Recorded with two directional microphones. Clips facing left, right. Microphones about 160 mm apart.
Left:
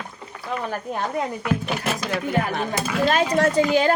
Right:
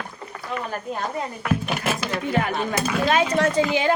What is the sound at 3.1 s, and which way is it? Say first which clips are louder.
Speech: left 1 dB; 40° left (ahead or behind).